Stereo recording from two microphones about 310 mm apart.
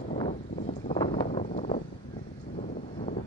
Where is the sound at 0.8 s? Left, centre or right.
Centre.